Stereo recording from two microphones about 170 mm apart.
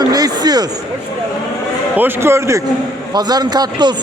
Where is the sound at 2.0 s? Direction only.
15° right (ahead or behind).